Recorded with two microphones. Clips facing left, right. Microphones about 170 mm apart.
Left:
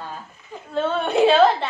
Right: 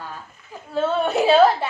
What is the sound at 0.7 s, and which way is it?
Speech, 5° right (ahead or behind).